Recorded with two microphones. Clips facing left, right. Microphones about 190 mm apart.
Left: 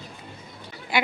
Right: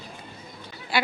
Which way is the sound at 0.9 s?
20° left (ahead or behind).